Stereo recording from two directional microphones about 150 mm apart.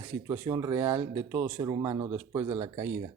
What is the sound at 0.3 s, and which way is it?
Speech, 25° right (ahead or behind).